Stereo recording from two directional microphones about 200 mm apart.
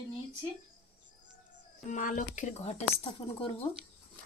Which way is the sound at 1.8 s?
40° left (ahead or behind).